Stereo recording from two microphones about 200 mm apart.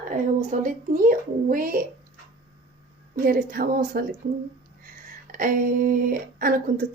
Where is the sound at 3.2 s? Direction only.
45° right (ahead or behind).